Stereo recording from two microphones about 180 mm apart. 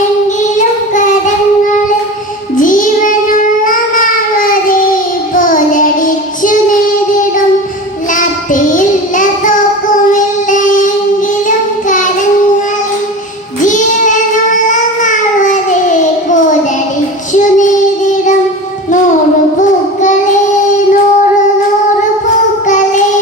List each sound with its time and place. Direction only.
2.6 s child singing: 45° left (ahead or behind)
8.1 s child singing: 45° left (ahead or behind)
13.6 s child singing: 45° left (ahead or behind)
22.6 s music: 40° left (ahead or behind)